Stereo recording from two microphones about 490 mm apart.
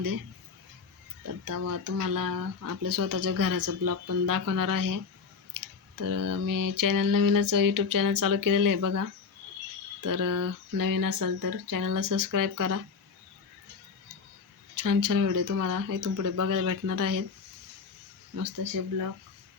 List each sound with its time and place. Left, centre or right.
1.5 s speech: right
5.5 s clicking: right
6.0 s speech: right
14.8 s speech: right
18.4 s speech: right